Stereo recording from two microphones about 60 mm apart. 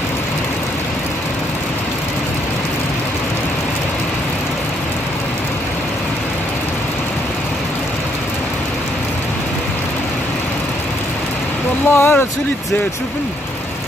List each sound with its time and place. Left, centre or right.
11.9 s speech: left